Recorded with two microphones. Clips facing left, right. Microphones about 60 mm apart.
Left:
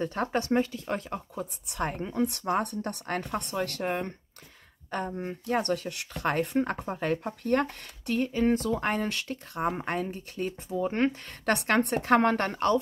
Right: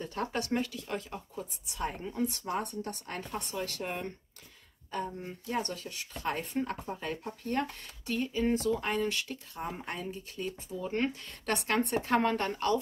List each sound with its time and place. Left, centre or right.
0.0 s speech: left